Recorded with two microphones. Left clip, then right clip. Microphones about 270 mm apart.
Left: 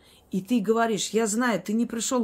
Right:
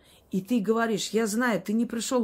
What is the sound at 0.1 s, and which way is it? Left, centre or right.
Speech, centre.